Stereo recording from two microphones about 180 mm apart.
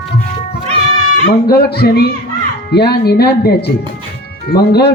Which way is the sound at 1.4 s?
60° left (ahead or behind).